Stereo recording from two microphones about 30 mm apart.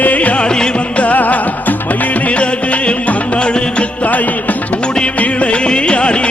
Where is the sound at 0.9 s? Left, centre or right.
Left.